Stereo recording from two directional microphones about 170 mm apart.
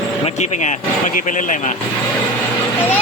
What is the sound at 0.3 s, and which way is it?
Speech, 40° left (ahead or behind).